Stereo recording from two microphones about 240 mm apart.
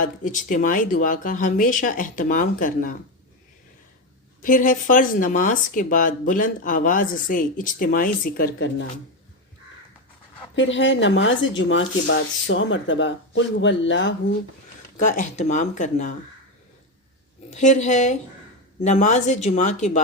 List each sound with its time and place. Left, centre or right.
0.0 s speech: left
4.4 s speech: left
10.5 s speech: left
14.9 s speech: left
17.5 s speech: left